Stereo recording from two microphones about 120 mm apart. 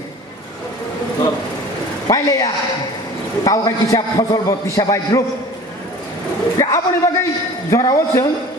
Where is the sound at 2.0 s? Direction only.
25° left (ahead or behind).